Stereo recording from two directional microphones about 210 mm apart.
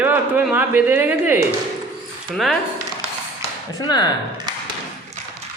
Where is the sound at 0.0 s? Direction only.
10° right (ahead or behind).